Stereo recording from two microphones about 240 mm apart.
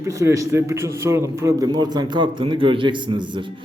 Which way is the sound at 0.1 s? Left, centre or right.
Centre.